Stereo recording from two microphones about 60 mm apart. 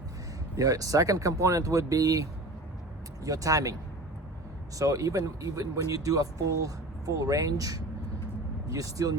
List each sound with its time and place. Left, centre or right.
0.5 s speech: right
3.2 s speech: right
4.8 s speech: right